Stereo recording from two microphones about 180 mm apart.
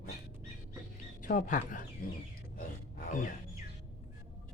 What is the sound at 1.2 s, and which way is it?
Speech, 45° left (ahead or behind).